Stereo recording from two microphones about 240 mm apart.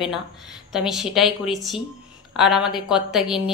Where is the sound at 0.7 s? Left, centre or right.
Centre.